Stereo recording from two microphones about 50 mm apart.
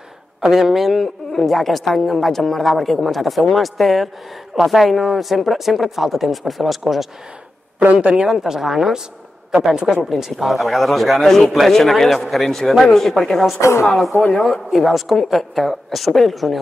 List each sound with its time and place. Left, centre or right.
0.5 s a man's voice: centre
1.0 s a man's voice: centre
7.8 s a man's voice: right
8.3 s a woman's voice: centre
10.0 s a man's voice: centre
13.6 s speech: left
13.8 s a man's voice: centre